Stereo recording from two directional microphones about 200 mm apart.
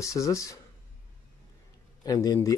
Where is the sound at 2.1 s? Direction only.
15° left (ahead or behind).